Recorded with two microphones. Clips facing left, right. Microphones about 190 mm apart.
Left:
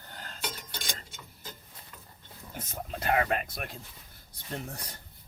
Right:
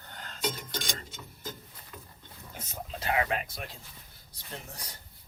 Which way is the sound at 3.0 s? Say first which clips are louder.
Left 2 dB; 50° left (ahead or behind).